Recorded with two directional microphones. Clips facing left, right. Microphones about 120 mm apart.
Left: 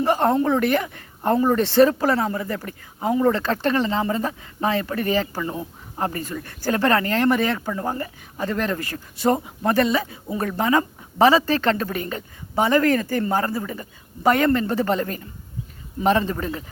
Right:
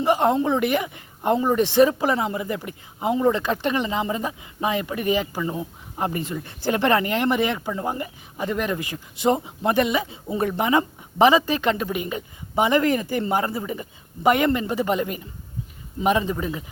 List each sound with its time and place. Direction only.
0.0 s speech: 15° right (ahead or behind)